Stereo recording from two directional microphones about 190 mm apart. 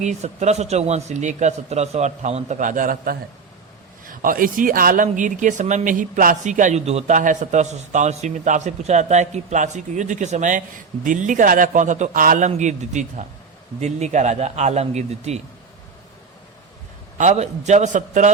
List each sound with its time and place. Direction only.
0.0 s speech: 40° right (ahead or behind)
17.2 s speech: 40° right (ahead or behind)